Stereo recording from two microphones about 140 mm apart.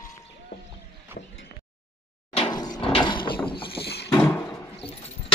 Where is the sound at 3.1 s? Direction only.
35° left (ahead or behind).